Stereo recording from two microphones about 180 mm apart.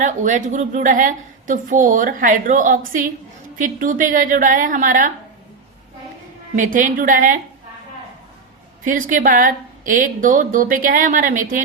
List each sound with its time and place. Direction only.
0.0 s a woman's voice: 45° right (ahead or behind)
6.6 s a woman's voice: 45° right (ahead or behind)
8.8 s a woman's voice: 45° right (ahead or behind)